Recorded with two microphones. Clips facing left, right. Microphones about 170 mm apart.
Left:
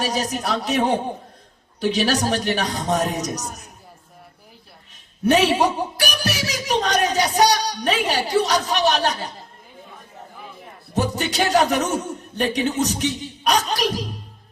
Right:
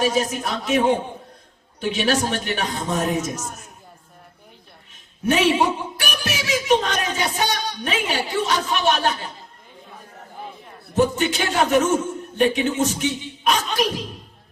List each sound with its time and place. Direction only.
0.0 s speech: 40° left (ahead or behind)
1.8 s speech: 40° left (ahead or behind)
5.2 s speech: 40° left (ahead or behind)
10.9 s speech: 40° left (ahead or behind)